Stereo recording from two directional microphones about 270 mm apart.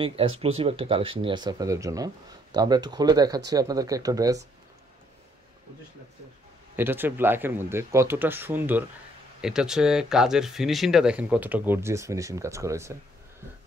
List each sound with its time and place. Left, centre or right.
0.0 s speech: centre
6.8 s speech: centre